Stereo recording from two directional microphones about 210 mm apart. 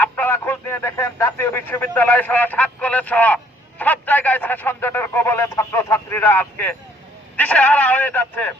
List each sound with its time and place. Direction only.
0.0 s speech: 10° left (ahead or behind)